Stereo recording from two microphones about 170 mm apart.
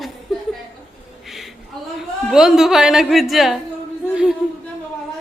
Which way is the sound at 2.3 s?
5° right (ahead or behind).